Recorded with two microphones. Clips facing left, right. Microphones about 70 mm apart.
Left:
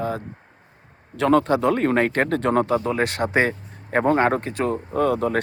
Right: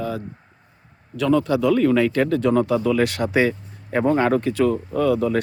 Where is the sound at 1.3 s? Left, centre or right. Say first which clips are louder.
Right 1 dB; left.